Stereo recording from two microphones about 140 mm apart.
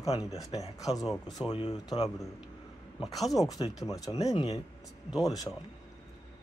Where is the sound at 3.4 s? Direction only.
25° left (ahead or behind).